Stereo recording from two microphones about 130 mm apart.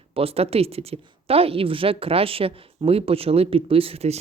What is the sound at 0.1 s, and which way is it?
A woman's voice, 50° right (ahead or behind).